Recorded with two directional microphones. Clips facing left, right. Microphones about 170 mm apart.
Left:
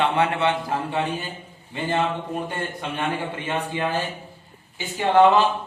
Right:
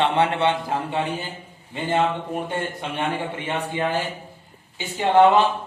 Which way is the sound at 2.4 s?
20° right (ahead or behind).